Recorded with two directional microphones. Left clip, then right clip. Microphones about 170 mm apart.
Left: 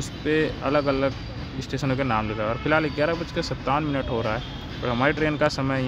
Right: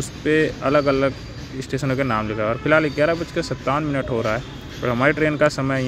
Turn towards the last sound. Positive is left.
turn(degrees=-20)  # may be behind; listen again after turning